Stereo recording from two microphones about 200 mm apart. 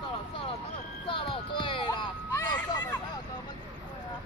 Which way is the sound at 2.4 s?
10° left (ahead or behind).